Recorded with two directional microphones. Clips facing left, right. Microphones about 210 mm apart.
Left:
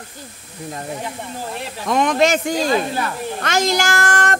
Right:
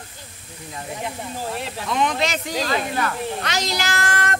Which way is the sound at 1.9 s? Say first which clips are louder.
Left 7 dB; 45° left (ahead or behind).